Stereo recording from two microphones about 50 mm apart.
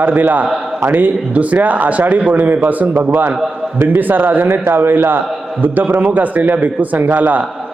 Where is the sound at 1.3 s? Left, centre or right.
Right.